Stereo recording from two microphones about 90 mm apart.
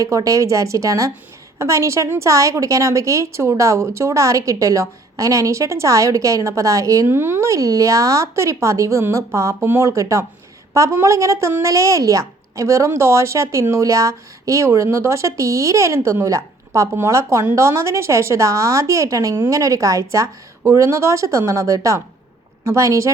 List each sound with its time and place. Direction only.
0.0 s a woman's voice: 40° right (ahead or behind)